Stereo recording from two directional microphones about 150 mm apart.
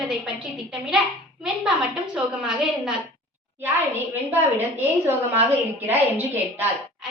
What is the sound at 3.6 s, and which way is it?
Speech, 15° right (ahead or behind).